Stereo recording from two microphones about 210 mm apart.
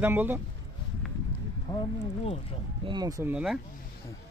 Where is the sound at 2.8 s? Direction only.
20° right (ahead or behind).